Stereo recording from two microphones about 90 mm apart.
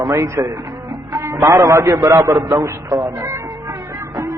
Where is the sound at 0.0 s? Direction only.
35° right (ahead or behind).